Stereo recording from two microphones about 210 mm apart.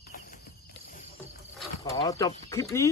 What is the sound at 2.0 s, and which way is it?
Speech, 15° left (ahead or behind).